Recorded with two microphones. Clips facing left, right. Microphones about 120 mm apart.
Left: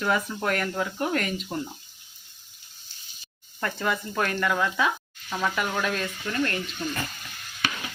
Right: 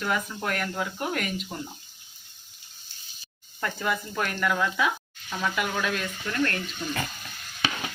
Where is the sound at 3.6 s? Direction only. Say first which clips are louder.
Left 1 dB; centre (ahead or behind).